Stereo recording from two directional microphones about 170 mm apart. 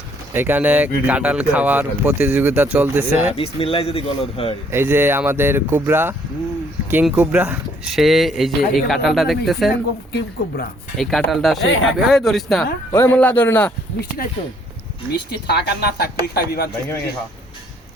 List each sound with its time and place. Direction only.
0.3 s speech: 10° right (ahead or behind)
3.3 s speech: 35° left (ahead or behind)
4.7 s speech: 15° right (ahead or behind)
10.1 s speech: 90° left
10.9 s speech: centre (ahead or behind)
12.9 s a man's voice: 10° left (ahead or behind)
15.3 s a woman's voice: 75° left (ahead or behind)